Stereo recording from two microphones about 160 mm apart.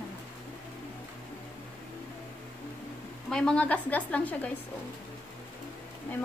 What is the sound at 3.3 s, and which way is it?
A woman's voice, 5° left (ahead or behind).